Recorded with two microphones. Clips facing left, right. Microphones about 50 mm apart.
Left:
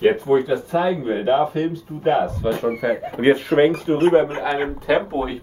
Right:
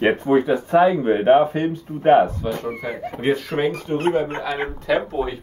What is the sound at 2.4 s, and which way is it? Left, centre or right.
Speech, centre.